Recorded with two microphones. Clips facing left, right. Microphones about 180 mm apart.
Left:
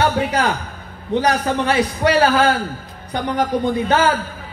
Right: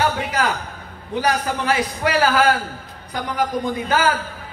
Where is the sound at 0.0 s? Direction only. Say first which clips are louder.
Left 3 dB; 30° left (ahead or behind).